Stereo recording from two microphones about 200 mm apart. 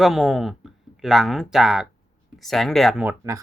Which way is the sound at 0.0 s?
Centre (ahead or behind).